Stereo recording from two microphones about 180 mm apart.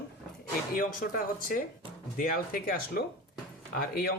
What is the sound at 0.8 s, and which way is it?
Speech, 50° left (ahead or behind).